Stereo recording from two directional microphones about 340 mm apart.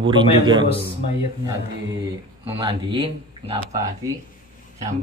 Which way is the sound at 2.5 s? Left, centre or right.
Centre.